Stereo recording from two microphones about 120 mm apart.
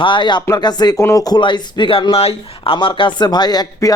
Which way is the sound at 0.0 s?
40° left (ahead or behind).